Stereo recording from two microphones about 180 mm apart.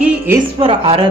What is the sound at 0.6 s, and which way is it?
Speech, 35° right (ahead or behind).